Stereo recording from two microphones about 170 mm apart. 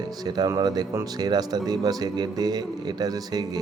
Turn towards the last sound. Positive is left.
turn(degrees=-20)  # may be behind; listen again after turning